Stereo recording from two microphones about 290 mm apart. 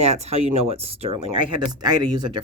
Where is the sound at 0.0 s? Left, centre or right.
Right.